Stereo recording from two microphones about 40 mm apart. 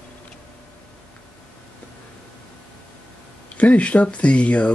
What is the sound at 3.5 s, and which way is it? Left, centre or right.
Speech, left.